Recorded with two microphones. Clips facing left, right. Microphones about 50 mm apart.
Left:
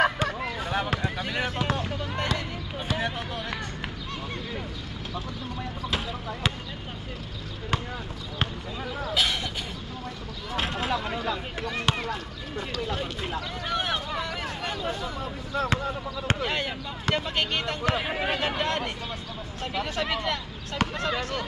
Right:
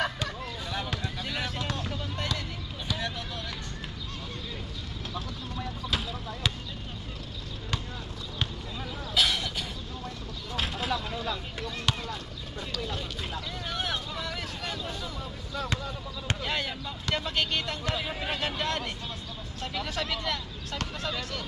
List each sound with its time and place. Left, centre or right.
0.0 s a sound: left
5.1 s speech: centre
8.4 s basketball bounce: left
10.5 s speech: left
14.2 s a sound: left
16.3 s speech: left